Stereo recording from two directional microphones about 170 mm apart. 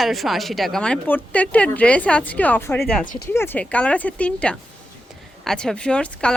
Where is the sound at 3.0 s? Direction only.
50° left (ahead or behind).